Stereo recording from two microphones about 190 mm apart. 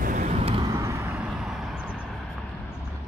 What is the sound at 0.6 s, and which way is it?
Vehicle, 15° right (ahead or behind).